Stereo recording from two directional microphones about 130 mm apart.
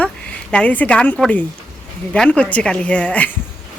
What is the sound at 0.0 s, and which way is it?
Speech, 10° left (ahead or behind).